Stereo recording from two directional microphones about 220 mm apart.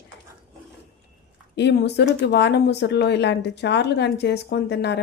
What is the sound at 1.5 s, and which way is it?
Speech, 50° left (ahead or behind).